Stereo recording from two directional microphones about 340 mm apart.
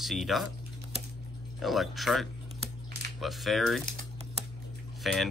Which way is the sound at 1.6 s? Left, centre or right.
Centre.